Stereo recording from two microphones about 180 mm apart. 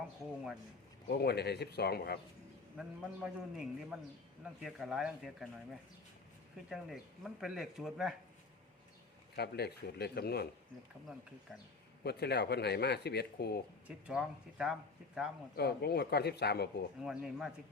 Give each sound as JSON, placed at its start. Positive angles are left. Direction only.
{"t": 1.0, "sound": "speech", "side_deg": 60}
{"t": 2.7, "sound": "speech", "side_deg": -5}
{"t": 6.7, "sound": "speech", "side_deg": 0}
{"t": 9.3, "sound": "speech", "side_deg": 65}
{"t": 12.0, "sound": "speech", "side_deg": 65}
{"t": 13.8, "sound": "speech", "side_deg": -5}
{"t": 15.5, "sound": "speech", "side_deg": 60}
{"t": 17.0, "sound": "speech", "side_deg": -5}